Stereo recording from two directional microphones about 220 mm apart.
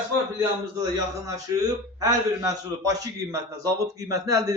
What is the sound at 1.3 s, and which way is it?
A man's voice, 15° right (ahead or behind).